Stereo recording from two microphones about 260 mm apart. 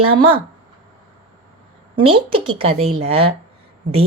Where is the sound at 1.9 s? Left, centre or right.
Centre.